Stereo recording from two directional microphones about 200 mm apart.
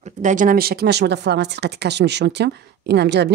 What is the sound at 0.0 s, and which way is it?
Speech, 35° right (ahead or behind).